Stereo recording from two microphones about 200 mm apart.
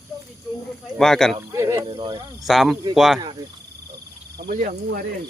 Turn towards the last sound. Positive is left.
turn(degrees=-45)  # may be behind; listen again after turning